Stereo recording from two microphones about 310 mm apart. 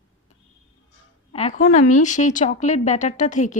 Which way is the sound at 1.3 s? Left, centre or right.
Left.